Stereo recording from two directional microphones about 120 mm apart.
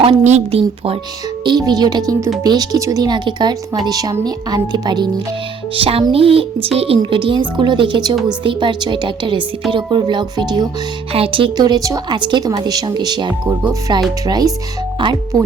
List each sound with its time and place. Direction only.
0.3 s speech: 60° right (ahead or behind)
1.5 s speech: 35° right (ahead or behind)
5.7 s music: 50° right (ahead or behind)
7.0 s speech: 45° right (ahead or behind)
8.4 s music: 40° right (ahead or behind)
9.7 s speech: 40° right (ahead or behind)
11.1 s music: 50° right (ahead or behind)
11.6 s speech: 30° right (ahead or behind)